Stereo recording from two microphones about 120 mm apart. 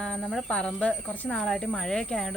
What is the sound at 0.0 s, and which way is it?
Speech, 5° left (ahead or behind).